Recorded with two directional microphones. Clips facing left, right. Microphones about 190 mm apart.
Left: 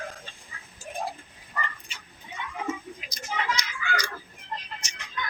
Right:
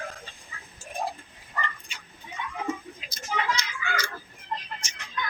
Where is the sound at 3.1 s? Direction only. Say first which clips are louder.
Right 1 dB; 15° left (ahead or behind).